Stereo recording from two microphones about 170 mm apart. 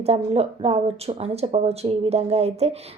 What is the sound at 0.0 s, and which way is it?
Speech, 35° right (ahead or behind).